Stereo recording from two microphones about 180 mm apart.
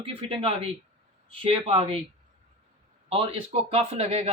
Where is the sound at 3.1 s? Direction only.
30° right (ahead or behind).